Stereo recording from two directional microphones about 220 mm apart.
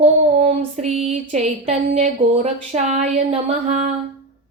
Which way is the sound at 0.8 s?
30° right (ahead or behind).